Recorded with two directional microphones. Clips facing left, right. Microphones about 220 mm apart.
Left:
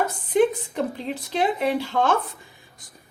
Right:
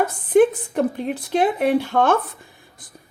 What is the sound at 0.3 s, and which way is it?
A woman's voice, 55° right (ahead or behind).